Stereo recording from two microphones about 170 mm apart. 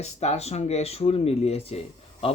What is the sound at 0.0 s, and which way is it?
Speech, 40° left (ahead or behind).